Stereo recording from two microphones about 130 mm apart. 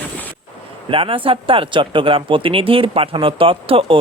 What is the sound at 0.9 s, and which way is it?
Speech, 45° right (ahead or behind).